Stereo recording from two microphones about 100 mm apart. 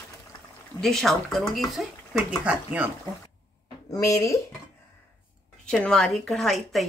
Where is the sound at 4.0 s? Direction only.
30° left (ahead or behind).